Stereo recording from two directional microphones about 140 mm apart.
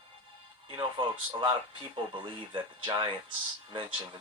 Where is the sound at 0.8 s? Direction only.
35° right (ahead or behind).